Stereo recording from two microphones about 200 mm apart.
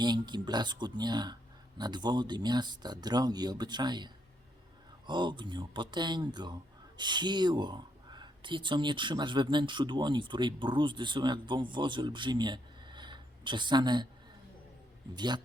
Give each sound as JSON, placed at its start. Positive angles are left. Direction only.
{"t": 0.0, "sound": "speech", "side_deg": -20}
{"t": 15.1, "sound": "speech", "side_deg": -20}